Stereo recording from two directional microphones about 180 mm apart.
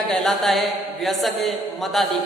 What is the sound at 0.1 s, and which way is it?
A man's voice, centre (ahead or behind).